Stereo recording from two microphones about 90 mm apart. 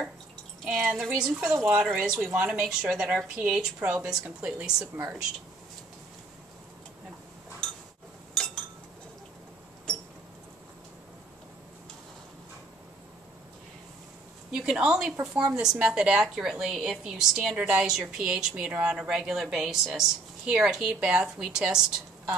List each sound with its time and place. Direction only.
0.7 s a woman's voice: 5° right (ahead or behind)
2.3 s a woman's voice: 15° right (ahead or behind)
14.5 s a woman's voice: 5° right (ahead or behind)